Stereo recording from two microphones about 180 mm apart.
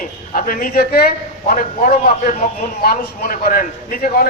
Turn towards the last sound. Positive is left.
turn(degrees=50)  # may be behind; listen again after turning